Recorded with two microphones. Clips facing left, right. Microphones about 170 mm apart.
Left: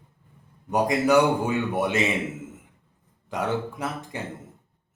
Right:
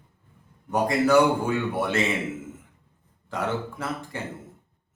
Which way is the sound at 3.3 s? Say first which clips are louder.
Left 1 dB; 15° left (ahead or behind).